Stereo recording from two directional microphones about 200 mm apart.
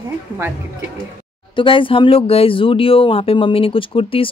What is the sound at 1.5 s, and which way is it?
Speech, 25° left (ahead or behind).